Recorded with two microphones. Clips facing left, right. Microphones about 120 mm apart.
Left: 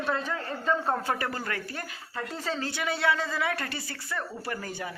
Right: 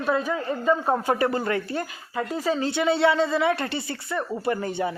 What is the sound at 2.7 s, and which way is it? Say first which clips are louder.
Speech: right 7 dB; 25° right (ahead or behind).